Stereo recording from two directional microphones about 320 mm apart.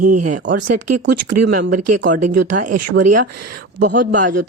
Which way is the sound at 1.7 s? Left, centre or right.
Right.